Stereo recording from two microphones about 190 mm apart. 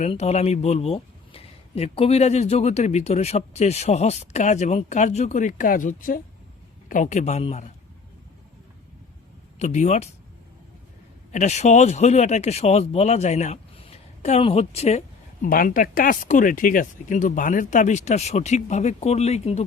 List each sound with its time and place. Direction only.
0.0 s speech: 35° left (ahead or behind)
9.6 s speech: 40° left (ahead or behind)
11.3 s speech: 40° left (ahead or behind)